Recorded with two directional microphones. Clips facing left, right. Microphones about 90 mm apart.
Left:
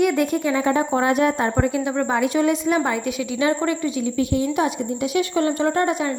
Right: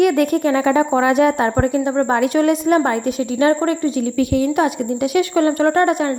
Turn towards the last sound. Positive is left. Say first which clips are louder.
# right 5 dB
turn(degrees=-60)  # may be behind; listen again after turning